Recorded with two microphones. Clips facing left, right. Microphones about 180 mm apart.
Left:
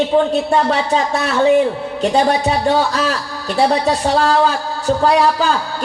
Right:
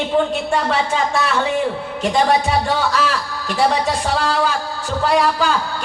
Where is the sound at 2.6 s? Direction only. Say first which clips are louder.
Left 3 dB; 35° left (ahead or behind).